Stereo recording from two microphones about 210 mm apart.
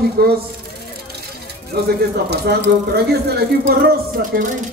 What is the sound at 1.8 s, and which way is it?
Speech, 50° right (ahead or behind).